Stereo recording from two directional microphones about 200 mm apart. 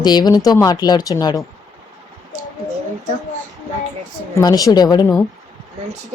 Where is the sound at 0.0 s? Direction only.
20° left (ahead or behind).